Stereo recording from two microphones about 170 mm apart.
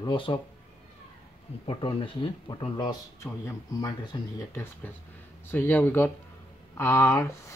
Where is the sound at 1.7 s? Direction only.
30° left (ahead or behind).